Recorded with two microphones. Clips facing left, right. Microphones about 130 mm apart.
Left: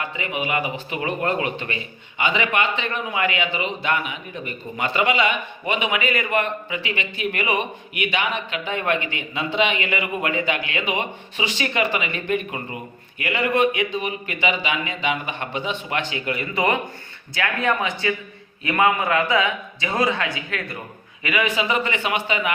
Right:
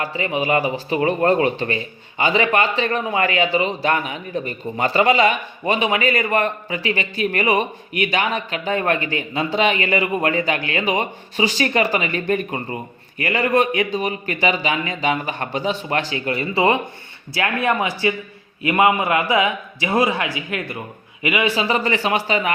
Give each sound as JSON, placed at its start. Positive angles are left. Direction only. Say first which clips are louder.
{"t": 0.0, "sound": "a man's voice", "louder": "right 5 dB", "side_deg": -35}
{"t": 18.0, "sound": "a man's voice", "louder": "right 3 dB", "side_deg": -20}